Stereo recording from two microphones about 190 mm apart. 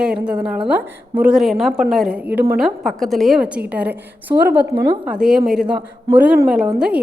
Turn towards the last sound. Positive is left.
turn(degrees=-5)  # may be behind; listen again after turning